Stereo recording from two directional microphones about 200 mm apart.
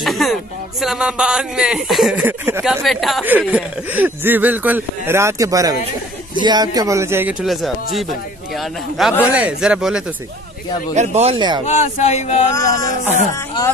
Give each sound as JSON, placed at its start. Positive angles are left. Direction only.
{"t": 0.0, "sound": "speech", "side_deg": 0}
{"t": 2.8, "sound": "speech", "side_deg": 0}
{"t": 11.0, "sound": "speech", "side_deg": -30}
{"t": 11.6, "sound": "speech", "side_deg": 35}
{"t": 12.5, "sound": "a sound", "side_deg": 15}